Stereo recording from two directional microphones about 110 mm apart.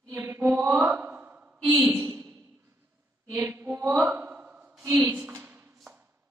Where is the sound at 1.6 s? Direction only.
10° right (ahead or behind).